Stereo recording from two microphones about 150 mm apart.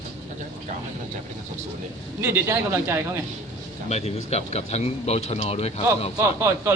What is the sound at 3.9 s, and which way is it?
Speech, 45° left (ahead or behind).